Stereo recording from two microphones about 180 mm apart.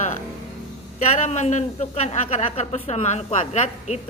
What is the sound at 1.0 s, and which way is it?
A woman's voice, 40° left (ahead or behind).